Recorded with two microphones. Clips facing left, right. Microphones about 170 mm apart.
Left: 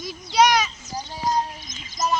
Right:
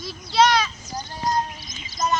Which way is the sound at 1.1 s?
10° left (ahead or behind).